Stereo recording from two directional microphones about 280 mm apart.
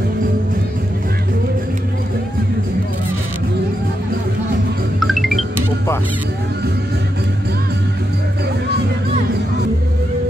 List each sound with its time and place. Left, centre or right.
5.0 s music: centre